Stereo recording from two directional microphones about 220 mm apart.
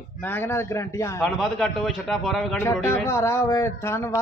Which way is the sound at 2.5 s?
10° left (ahead or behind).